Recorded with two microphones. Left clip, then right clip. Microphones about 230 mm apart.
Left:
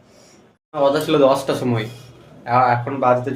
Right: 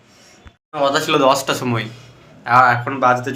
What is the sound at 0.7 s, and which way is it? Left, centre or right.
Speech, centre.